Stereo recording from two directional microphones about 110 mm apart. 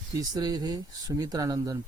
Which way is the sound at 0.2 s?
35° right (ahead or behind).